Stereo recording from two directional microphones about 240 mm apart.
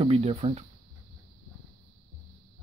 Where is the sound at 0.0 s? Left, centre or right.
Right.